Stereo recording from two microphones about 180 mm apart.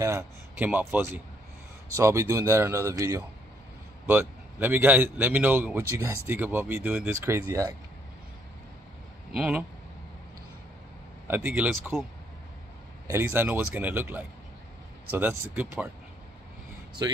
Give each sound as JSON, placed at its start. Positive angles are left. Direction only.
{"t": 0.0, "sound": "a man's voice", "side_deg": -15}
{"t": 9.3, "sound": "speech", "side_deg": -5}
{"t": 11.2, "sound": "a man's voice", "side_deg": -10}
{"t": 13.0, "sound": "a man's voice", "side_deg": -15}
{"t": 17.0, "sound": "speech", "side_deg": -20}